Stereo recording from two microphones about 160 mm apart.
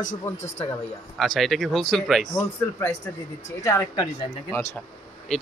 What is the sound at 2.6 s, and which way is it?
A man's voice, 15° left (ahead or behind).